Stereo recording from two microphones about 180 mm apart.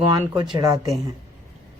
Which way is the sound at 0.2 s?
25° right (ahead or behind).